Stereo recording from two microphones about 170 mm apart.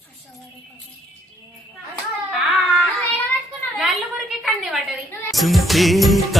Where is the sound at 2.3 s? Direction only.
Centre (ahead or behind).